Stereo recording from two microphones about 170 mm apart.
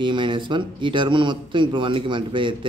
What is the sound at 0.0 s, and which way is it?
Speech, 30° right (ahead or behind).